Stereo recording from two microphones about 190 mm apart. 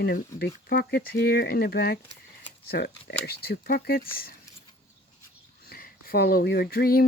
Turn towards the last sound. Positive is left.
turn(degrees=55)  # may be behind; listen again after turning